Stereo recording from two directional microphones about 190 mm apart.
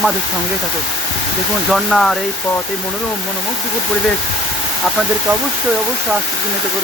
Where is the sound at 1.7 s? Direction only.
Centre (ahead or behind).